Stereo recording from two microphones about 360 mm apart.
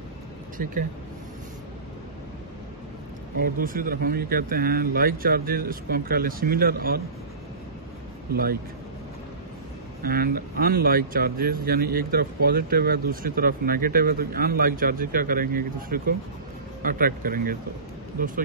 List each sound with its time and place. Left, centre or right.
0.6 s speech: right
3.3 s speech: right
8.3 s speech: right
10.0 s speech: right